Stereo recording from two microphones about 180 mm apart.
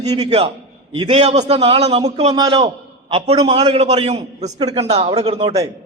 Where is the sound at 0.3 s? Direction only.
30° right (ahead or behind).